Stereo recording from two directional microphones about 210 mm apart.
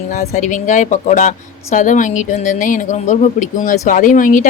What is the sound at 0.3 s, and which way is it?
A woman's voice, 35° left (ahead or behind).